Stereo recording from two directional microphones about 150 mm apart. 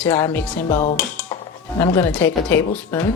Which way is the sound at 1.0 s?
10° left (ahead or behind).